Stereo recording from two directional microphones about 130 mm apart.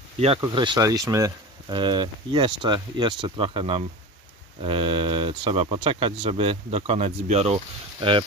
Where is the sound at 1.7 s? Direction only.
35° right (ahead or behind).